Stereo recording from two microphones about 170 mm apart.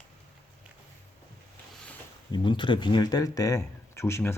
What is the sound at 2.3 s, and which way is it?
Speech, 30° left (ahead or behind).